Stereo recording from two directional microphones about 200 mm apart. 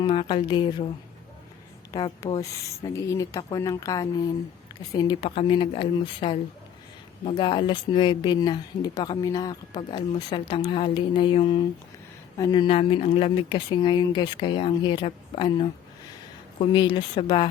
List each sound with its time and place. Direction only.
0.0 s speech: 25° left (ahead or behind)
1.9 s speech: 20° left (ahead or behind)